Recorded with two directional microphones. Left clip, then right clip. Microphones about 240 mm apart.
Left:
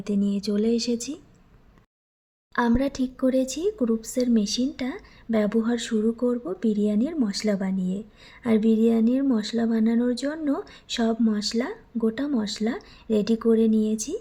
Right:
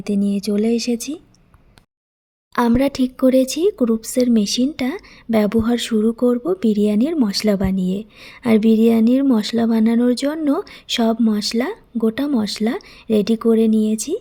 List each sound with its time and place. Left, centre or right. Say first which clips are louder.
0.0 s speech: right 5 dB; right
2.5 s speech: right 7 dB; right